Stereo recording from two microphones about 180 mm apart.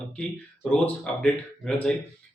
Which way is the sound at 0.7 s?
5° left (ahead or behind).